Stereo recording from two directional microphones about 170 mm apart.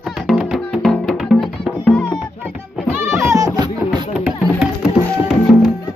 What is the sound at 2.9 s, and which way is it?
Music, 15° right (ahead or behind).